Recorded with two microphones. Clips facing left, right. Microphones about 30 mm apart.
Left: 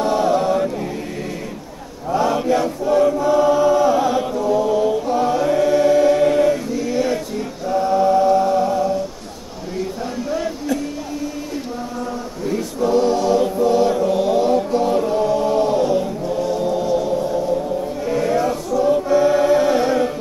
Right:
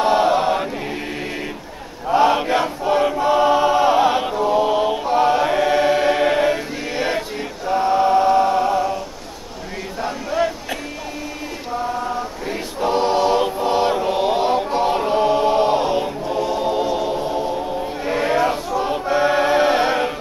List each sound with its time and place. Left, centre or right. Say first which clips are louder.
0.0 s chant: right 1 dB; right
2.0 s chant: right 2 dB; right
10.0 s chant: right 6 dB; right
12.4 s choir: left 4 dB; right